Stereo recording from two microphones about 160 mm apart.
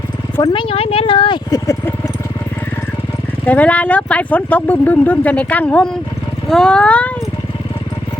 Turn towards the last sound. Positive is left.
turn(degrees=10)  # may be behind; listen again after turning